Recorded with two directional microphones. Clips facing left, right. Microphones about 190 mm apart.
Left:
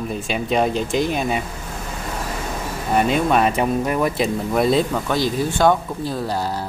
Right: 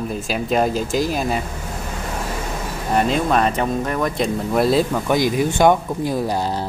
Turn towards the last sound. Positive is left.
turn(degrees=-15)  # may be behind; listen again after turning